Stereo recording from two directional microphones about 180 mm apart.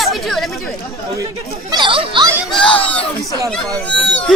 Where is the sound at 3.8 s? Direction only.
5° left (ahead or behind).